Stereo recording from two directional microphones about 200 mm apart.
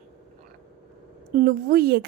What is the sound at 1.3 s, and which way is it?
Speech, 50° right (ahead or behind).